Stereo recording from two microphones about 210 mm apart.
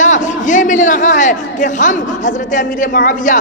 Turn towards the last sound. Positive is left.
turn(degrees=40)  # may be behind; listen again after turning